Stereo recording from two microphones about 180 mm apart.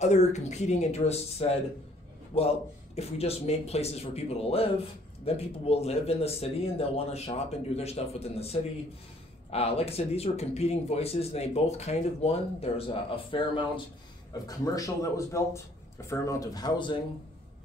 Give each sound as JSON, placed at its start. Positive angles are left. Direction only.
{"t": 0.0, "sound": "speech", "side_deg": 40}
{"t": 14.4, "sound": "speech", "side_deg": 20}